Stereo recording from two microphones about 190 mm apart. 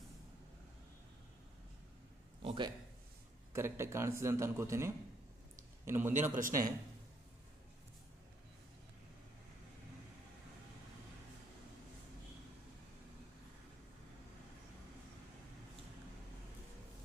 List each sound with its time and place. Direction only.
2.4 s a sound: 30° right (ahead or behind)
3.5 s a man's voice: 15° right (ahead or behind)
6.3 s speech: 45° right (ahead or behind)